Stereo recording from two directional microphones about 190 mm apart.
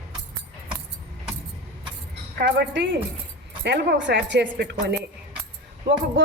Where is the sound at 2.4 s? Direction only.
65° right (ahead or behind).